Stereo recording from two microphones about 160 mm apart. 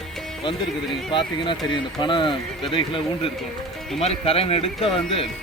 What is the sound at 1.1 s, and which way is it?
Speech, 30° left (ahead or behind).